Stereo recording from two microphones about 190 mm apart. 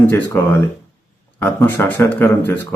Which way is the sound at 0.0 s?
10° left (ahead or behind).